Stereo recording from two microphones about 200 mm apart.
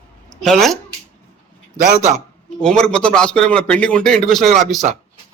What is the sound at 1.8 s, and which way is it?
Speech, 40° right (ahead or behind).